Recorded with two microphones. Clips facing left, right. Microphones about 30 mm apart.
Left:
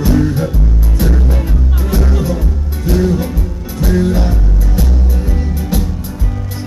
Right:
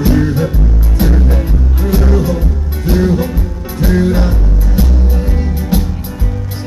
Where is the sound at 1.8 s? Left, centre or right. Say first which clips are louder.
Right 3 dB; centre.